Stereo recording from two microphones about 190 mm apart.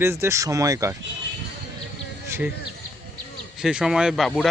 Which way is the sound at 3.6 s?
5° right (ahead or behind).